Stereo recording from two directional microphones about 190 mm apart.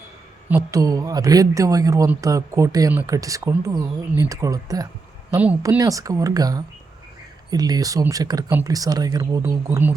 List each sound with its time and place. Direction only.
0.4 s speech: 15° right (ahead or behind)